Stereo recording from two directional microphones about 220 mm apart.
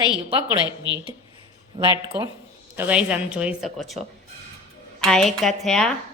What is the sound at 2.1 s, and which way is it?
A woman's voice, 5° right (ahead or behind).